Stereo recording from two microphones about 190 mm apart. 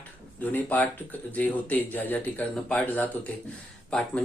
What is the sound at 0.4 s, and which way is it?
Speech, 10° left (ahead or behind).